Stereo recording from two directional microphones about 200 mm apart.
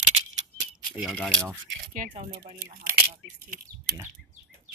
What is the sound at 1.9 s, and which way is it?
Speech, 40° right (ahead or behind).